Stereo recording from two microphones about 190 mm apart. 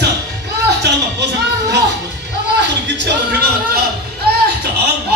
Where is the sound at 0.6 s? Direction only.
65° right (ahead or behind).